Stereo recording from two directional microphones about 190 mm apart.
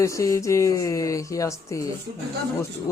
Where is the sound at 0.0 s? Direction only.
15° left (ahead or behind).